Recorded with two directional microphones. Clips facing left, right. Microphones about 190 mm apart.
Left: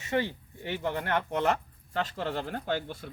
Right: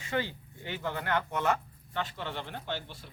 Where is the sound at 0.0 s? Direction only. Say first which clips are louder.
Left 3 dB; 25° left (ahead or behind).